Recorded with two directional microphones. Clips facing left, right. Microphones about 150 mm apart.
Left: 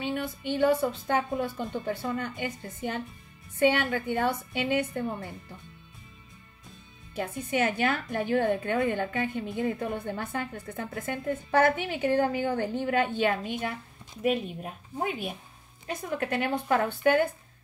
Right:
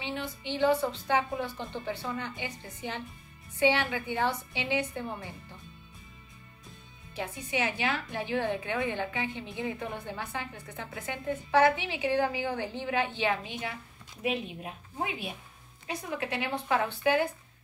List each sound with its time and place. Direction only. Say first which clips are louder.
0.0 s a woman's voice: left 5 dB; 50° left (ahead or behind)
7.2 s a woman's voice: left 4 dB; 50° left (ahead or behind)